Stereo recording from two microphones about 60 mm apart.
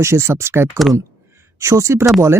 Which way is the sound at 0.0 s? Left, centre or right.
Right.